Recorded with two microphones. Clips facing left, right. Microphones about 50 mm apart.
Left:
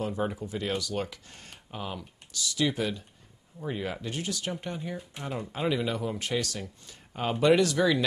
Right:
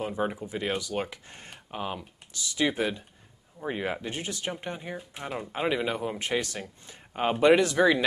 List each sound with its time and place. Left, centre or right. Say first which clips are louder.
0.0 s speech: right 1 dB; right